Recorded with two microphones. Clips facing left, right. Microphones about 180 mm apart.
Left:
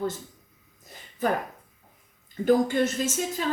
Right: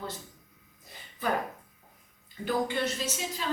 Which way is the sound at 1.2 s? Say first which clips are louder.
Left 4 dB; 45° left (ahead or behind).